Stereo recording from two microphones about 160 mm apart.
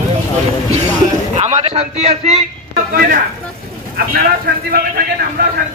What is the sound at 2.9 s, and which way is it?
A man's voice, 65° right (ahead or behind).